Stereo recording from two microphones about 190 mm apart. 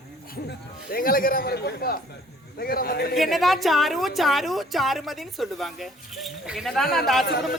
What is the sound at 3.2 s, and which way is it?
A woman's voice, centre (ahead or behind).